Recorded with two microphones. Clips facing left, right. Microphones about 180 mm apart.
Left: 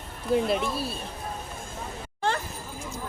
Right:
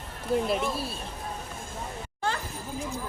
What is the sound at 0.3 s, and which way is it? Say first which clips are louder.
Speech: left 2 dB; centre (ahead or behind).